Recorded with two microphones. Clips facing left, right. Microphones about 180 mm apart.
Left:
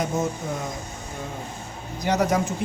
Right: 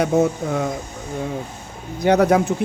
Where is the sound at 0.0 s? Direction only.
65° right (ahead or behind).